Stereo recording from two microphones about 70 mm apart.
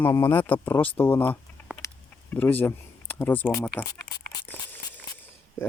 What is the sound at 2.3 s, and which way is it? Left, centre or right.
Speech, left.